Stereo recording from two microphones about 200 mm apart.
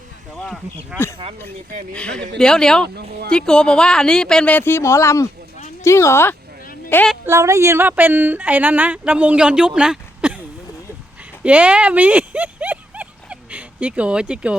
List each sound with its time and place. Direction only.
0.3 s speech: centre (ahead or behind)
7.3 s speech: 15° right (ahead or behind)
11.4 s clip-clop: 5° right (ahead or behind)